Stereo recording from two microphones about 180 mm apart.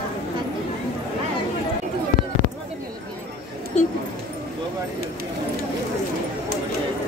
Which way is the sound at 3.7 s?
40° left (ahead or behind).